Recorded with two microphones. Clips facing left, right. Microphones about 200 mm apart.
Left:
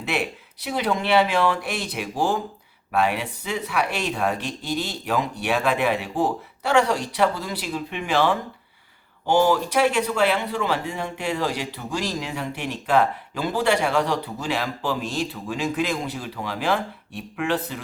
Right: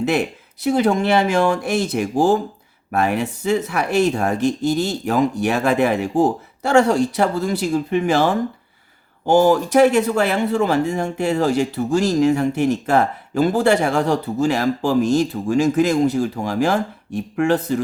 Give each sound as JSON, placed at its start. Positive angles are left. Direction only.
{"t": 0.0, "sound": "speech", "side_deg": -45}